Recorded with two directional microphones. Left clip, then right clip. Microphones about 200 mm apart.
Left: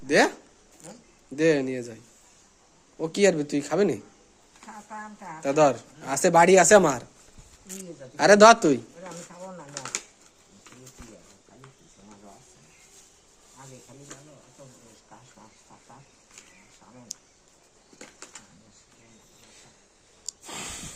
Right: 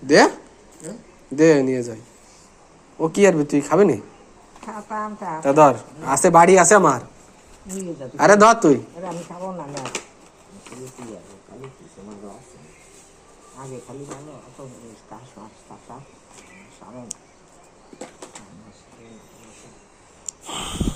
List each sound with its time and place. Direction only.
0.1 s speech: 20° left (ahead or behind)
1.4 s speech: 20° left (ahead or behind)
3.0 s speech: 30° left (ahead or behind)
5.4 s speech: 25° left (ahead or behind)
6.1 s speech: 50° left (ahead or behind)
8.1 s speech: 50° left (ahead or behind)
20.4 s a sound: 30° left (ahead or behind)